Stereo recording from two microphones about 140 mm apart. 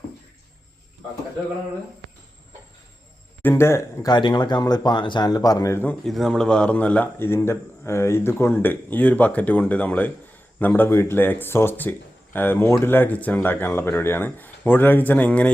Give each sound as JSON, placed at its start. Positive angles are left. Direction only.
{"t": 3.4, "sound": "speech", "side_deg": 15}
{"t": 4.1, "sound": "speech", "side_deg": 30}
{"t": 6.1, "sound": "speech", "side_deg": 0}